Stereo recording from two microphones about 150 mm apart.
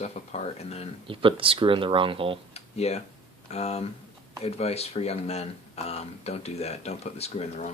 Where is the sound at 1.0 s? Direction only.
35° right (ahead or behind).